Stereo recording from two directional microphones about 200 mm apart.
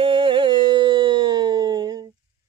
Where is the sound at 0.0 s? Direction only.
25° right (ahead or behind).